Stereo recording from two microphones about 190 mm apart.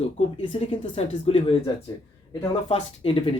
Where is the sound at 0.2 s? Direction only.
30° left (ahead or behind).